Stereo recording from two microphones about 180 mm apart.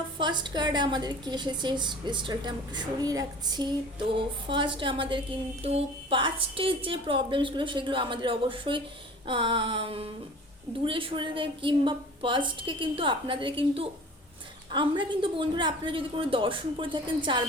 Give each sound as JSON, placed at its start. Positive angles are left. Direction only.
{"t": 0.2, "sound": "a woman's voice", "side_deg": -25}